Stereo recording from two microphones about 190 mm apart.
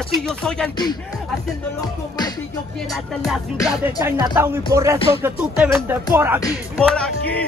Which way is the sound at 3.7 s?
10° right (ahead or behind).